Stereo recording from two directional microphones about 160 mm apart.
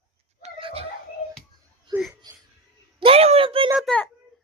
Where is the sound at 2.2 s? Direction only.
25° right (ahead or behind).